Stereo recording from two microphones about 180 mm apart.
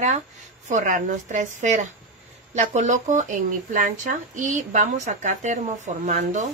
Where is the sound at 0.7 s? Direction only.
45° right (ahead or behind).